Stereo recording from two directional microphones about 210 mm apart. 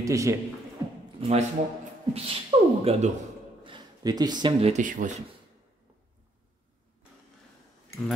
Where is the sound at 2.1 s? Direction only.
30° right (ahead or behind).